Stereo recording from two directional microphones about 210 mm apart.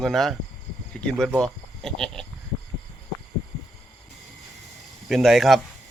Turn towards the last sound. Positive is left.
turn(degrees=0)  # may be behind; listen again after turning